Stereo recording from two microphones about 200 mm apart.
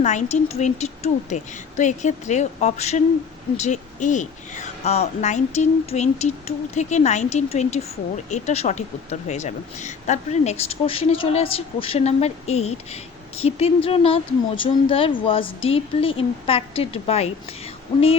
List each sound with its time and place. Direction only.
0.0 s speech: 35° left (ahead or behind)